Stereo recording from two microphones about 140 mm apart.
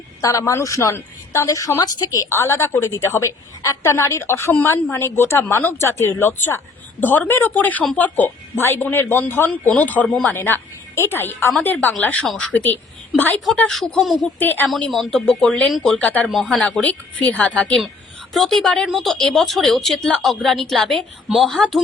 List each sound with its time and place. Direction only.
0.2 s a woman's voice: 25° left (ahead or behind); by 14.3 s centre (ahead or behind)
14.3 s a woman's voice: 15° left (ahead or behind)
14.7 s a woman's voice: 5° left (ahead or behind)